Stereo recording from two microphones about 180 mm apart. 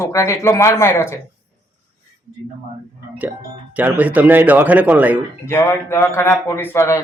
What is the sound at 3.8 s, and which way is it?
Speech, 10° right (ahead or behind).